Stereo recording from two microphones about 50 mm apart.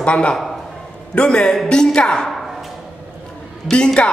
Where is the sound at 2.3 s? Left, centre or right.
Centre.